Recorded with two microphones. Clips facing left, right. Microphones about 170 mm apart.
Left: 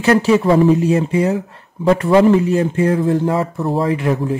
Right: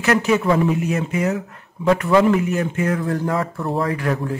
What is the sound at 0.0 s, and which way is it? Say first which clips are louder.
Speech: left 5 dB; 30° left (ahead or behind).